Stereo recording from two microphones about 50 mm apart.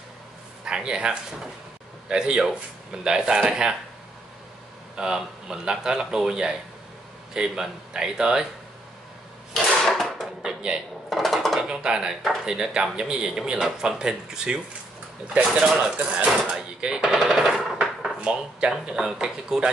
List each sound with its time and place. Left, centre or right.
0.7 s speech: centre
4.9 s speech: centre
9.5 s drawer open or close: centre
10.4 s a sound: centre
11.1 s dishes: centre
11.6 s speech: centre
15.8 s speech: centre
17.1 s machine gun: centre
18.2 s speech: centre